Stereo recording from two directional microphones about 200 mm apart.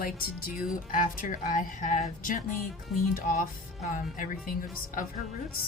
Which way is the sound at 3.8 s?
40° left (ahead or behind).